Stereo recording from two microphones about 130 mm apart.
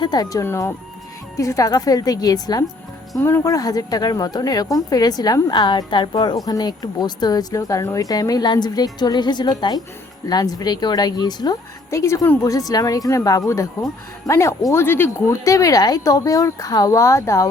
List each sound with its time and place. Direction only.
0.0 s speech: 30° left (ahead or behind)
3.2 s a woman's voice: 20° left (ahead or behind)